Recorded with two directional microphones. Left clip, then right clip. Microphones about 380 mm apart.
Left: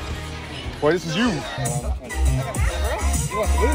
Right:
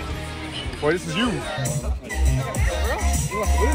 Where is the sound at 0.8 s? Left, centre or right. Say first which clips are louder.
Left 2 dB; left.